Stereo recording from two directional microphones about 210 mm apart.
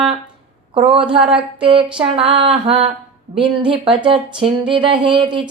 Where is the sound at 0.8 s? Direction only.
25° right (ahead or behind).